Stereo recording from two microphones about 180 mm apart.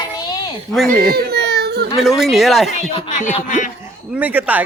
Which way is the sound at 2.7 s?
40° left (ahead or behind).